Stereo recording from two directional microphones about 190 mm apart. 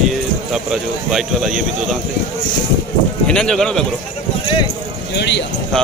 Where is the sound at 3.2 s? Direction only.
5° left (ahead or behind).